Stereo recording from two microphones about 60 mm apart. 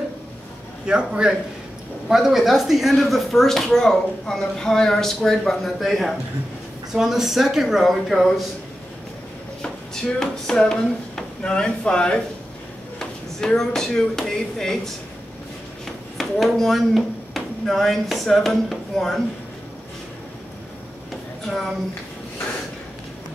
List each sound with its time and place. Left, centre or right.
0.8 s a man's voice: centre
10.1 s speech: centre
16.2 s speech: centre
21.5 s speech: centre